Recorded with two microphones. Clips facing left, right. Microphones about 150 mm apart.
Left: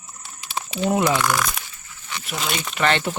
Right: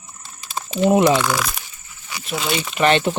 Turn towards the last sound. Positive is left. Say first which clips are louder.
# right 5 dB
turn(degrees=-20)  # may be behind; listen again after turning